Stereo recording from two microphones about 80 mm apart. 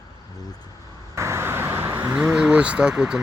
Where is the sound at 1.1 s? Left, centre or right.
Right.